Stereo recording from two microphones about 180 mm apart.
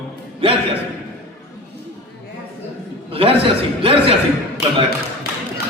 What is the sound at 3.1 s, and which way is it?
A man's voice, 30° right (ahead or behind).